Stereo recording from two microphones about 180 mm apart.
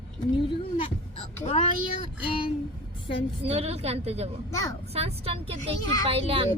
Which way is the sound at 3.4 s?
35° right (ahead or behind).